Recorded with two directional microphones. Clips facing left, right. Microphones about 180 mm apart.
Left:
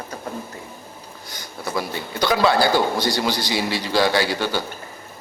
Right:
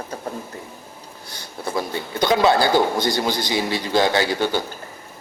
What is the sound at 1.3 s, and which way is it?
A man's voice, 25° right (ahead or behind).